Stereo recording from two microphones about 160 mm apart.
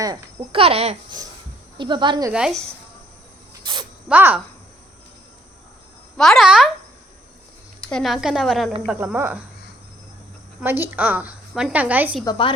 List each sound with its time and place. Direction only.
0.0 s speech: 25° right (ahead or behind)
0.6 s speech: 40° right (ahead or behind)
2.3 s speech: centre (ahead or behind)
3.6 s a sound: 30° right (ahead or behind)
4.1 s a woman's voice: 10° right (ahead or behind)
6.1 s speech: centre (ahead or behind)
7.8 s speech: 5° left (ahead or behind)
8.9 s a woman's voice: 10° right (ahead or behind)
10.6 s a woman's voice: 10° right (ahead or behind)
12.2 s a woman's voice: 30° left (ahead or behind)